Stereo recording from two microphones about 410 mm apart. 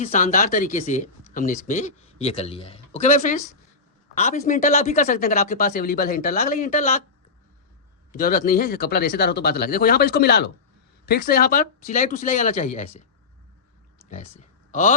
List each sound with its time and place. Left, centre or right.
0.0 s speech: centre
8.1 s speech: left
14.1 s speech: centre